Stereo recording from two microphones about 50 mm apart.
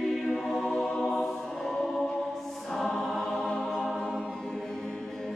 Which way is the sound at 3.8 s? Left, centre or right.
Centre.